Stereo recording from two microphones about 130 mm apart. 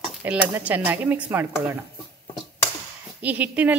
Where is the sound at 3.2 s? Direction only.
10° right (ahead or behind).